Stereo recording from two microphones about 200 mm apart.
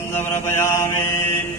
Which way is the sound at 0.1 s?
10° left (ahead or behind).